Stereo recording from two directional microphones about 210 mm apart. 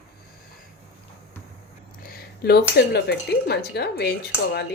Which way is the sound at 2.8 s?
50° left (ahead or behind).